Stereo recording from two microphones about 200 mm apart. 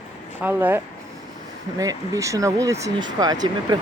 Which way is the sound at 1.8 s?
15° right (ahead or behind).